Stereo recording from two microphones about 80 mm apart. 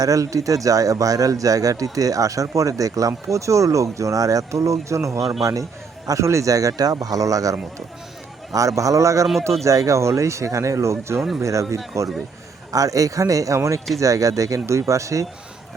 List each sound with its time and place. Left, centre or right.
0.0 s speech: right